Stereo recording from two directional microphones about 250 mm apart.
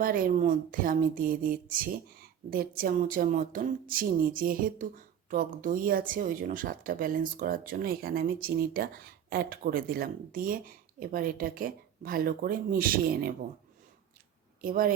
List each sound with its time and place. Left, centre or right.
0.0 s speech: right
14.6 s speech: right